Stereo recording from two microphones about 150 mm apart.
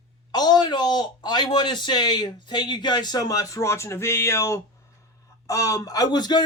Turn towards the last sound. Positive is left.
turn(degrees=30)  # may be behind; listen again after turning